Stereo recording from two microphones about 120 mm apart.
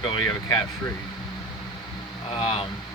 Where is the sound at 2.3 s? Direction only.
50° left (ahead or behind).